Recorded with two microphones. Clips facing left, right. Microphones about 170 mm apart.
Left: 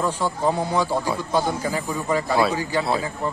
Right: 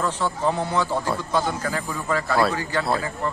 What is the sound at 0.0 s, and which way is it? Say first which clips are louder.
A man's voice: left 1 dB; 10° left (ahead or behind).